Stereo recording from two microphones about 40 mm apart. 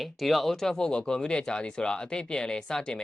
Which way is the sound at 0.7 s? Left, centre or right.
Centre.